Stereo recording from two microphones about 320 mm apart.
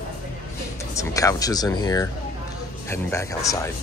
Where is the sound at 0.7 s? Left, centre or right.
Centre.